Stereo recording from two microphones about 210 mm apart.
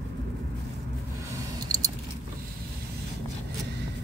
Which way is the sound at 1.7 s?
15° right (ahead or behind).